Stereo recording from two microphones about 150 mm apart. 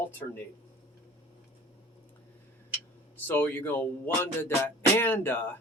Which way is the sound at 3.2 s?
10° left (ahead or behind).